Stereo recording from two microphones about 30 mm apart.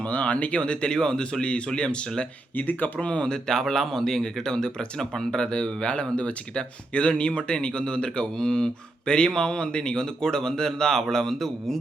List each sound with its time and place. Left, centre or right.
0.1 s speech: left
0.6 s speech: left
2.6 s speech: left
3.0 s speech: left
3.2 s speech: left
3.7 s a man's voice: centre
5.3 s a man's voice: left; by 11.8 s centre